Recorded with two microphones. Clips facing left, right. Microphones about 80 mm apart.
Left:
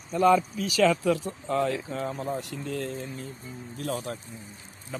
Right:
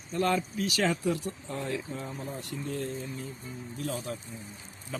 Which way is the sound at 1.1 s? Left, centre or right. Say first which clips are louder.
Left 7 dB; left.